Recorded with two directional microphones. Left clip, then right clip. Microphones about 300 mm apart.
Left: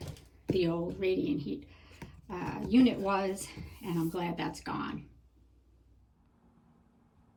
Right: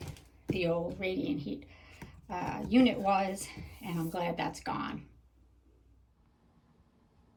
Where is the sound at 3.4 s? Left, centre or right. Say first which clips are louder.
Left 1 dB; right.